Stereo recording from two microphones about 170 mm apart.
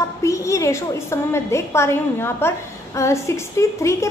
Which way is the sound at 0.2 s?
15° left (ahead or behind).